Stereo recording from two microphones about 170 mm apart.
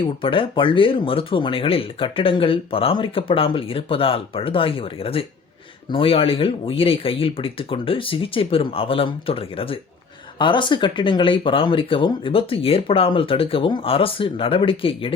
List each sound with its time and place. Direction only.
0.0 s speech: 30° left (ahead or behind)